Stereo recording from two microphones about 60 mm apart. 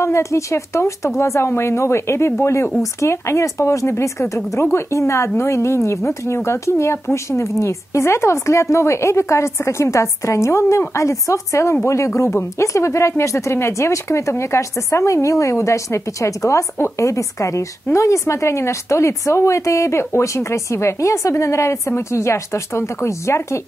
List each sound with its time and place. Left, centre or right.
0.0 s speech: left